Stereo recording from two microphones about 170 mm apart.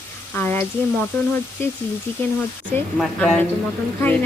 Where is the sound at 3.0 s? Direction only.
5° left (ahead or behind).